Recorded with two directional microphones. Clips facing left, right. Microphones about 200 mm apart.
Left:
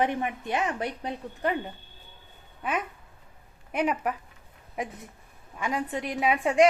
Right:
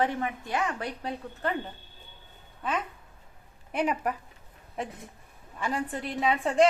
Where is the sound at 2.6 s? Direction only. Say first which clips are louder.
Left 1 dB; 10° left (ahead or behind).